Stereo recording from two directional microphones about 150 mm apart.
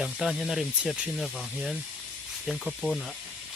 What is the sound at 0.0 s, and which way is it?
Speech, centre (ahead or behind).